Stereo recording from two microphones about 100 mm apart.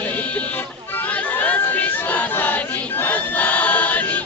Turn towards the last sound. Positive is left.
turn(degrees=15)  # may be behind; listen again after turning